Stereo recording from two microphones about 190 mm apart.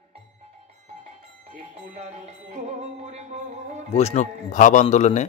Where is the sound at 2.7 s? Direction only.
35° right (ahead or behind).